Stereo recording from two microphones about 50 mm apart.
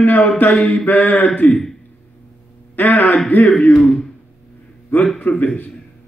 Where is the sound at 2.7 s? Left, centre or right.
Left.